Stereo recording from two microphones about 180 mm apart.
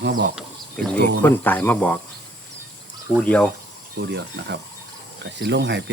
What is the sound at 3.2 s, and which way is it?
Speech, 10° left (ahead or behind).